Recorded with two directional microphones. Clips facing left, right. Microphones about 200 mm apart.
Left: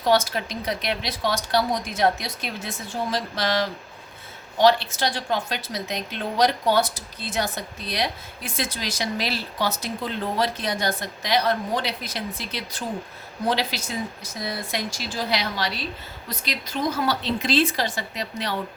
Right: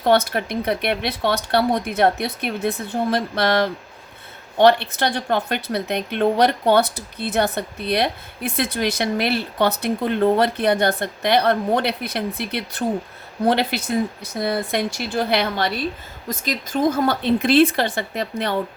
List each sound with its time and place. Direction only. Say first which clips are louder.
0.0 s a woman's voice: right 3 dB; 60° right (ahead or behind)